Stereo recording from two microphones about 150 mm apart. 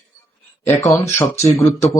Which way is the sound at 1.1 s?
20° left (ahead or behind).